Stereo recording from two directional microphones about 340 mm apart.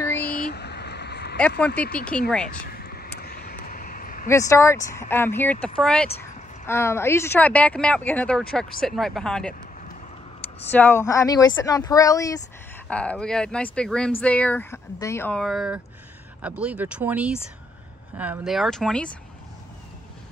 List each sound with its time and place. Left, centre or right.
0.2 s vehicle: left
2.0 s speech: centre
2.7 s vehicle: left
4.3 s speech: centre
6.0 s a sound: left
6.6 s speech: centre
10.7 s speech: centre